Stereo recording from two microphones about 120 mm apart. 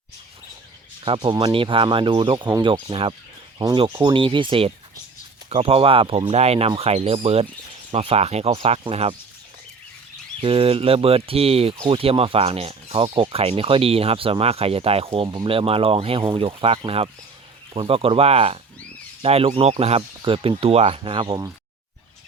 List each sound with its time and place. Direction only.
1.0 s speech: 45° right (ahead or behind)
10.4 s speech: 50° right (ahead or behind)